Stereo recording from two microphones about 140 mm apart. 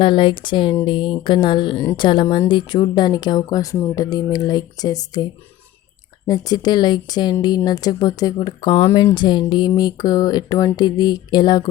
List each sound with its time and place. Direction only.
0.0 s speech: 35° left (ahead or behind)
8.9 s speech: 20° left (ahead or behind)
9.1 s speech: 30° left (ahead or behind)